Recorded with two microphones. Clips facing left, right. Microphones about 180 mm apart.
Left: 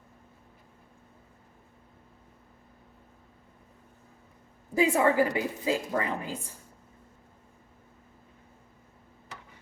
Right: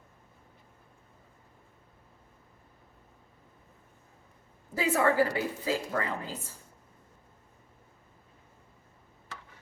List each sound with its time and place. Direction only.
4.7 s a woman's voice: 15° left (ahead or behind)